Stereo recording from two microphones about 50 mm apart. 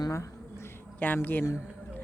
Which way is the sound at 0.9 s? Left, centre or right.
Left.